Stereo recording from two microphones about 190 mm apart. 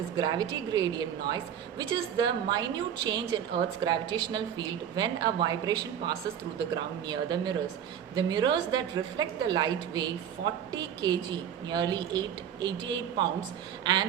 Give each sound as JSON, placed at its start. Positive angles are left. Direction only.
{"t": 0.2, "sound": "a woman's voice", "side_deg": -20}